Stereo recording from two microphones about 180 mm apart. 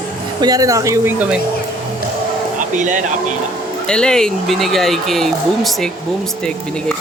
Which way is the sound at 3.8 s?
5° left (ahead or behind).